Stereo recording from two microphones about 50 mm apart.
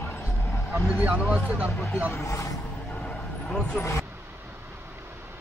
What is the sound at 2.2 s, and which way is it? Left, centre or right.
Speech, left.